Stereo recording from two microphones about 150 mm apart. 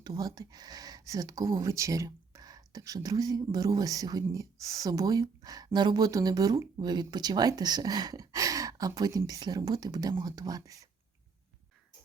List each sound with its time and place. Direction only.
0.0 s speech: 25° right (ahead or behind)